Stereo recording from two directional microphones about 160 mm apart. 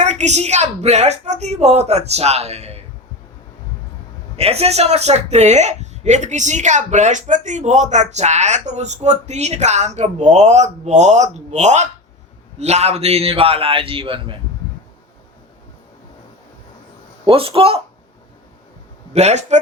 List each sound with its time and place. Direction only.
0.0 s a woman's voice: 45° right (ahead or behind)
4.4 s a woman's voice: 40° right (ahead or behind)
17.2 s a man's voice: 35° right (ahead or behind)
19.1 s a woman's voice: 45° right (ahead or behind)